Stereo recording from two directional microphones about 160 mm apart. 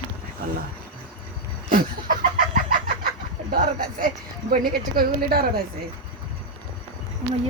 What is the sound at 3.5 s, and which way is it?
Speech, 60° right (ahead or behind).